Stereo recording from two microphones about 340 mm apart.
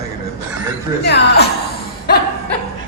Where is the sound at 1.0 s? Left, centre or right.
Left.